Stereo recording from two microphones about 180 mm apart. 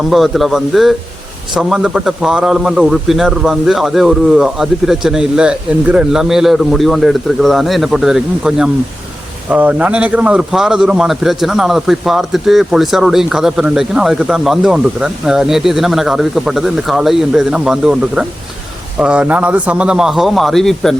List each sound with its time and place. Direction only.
0.1 s a man's voice: centre (ahead or behind)